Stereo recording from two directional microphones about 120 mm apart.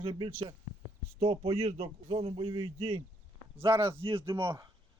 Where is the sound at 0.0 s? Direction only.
45° right (ahead or behind).